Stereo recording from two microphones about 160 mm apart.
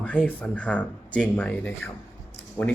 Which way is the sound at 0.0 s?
10° left (ahead or behind).